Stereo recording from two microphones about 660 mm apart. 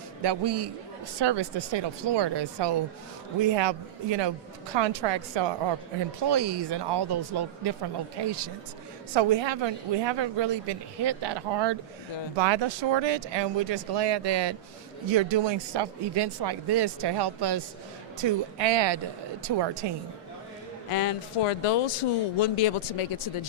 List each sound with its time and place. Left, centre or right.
0.2 s a woman's voice: right
9.1 s a woman's voice: right
20.9 s speech: left